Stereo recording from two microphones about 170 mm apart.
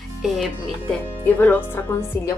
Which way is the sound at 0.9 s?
10° left (ahead or behind).